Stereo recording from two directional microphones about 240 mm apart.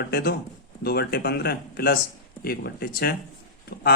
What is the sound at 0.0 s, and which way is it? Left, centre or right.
Speech, left.